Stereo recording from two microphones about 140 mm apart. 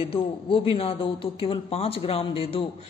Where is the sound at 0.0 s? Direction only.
40° left (ahead or behind).